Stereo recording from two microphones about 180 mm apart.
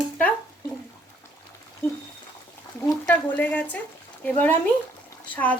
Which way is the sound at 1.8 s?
10° left (ahead or behind).